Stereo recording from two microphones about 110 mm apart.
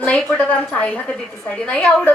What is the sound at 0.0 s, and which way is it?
A woman's voice, 10° left (ahead or behind).